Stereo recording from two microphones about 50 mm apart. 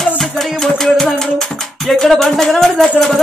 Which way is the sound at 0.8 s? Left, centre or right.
Centre.